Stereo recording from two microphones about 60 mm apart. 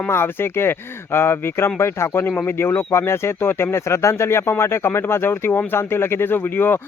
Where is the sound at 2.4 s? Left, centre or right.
Left.